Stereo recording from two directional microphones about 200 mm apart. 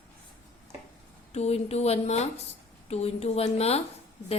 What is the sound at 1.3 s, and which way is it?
Speech, 30° left (ahead or behind).